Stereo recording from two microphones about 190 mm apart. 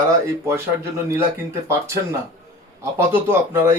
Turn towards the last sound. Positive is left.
turn(degrees=-15)  # may be behind; listen again after turning